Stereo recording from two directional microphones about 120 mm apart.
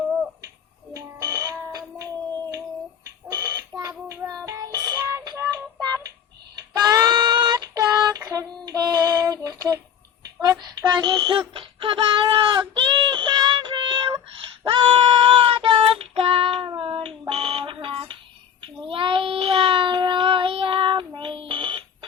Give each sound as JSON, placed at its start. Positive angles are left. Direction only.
{"t": 0.9, "sound": "music", "side_deg": -25}
{"t": 3.8, "sound": "child singing", "side_deg": -25}
{"t": 4.4, "sound": "music", "side_deg": -25}
{"t": 6.7, "sound": "a sound", "side_deg": -35}
{"t": 7.9, "sound": "child singing", "side_deg": -30}